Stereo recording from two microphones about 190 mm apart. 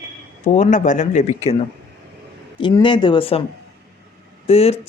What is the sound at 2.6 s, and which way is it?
Speech, 25° left (ahead or behind).